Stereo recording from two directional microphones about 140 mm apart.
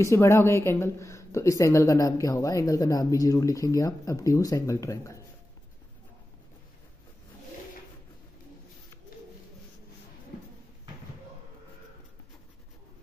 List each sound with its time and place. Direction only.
0.0 s speech: 20° left (ahead or behind)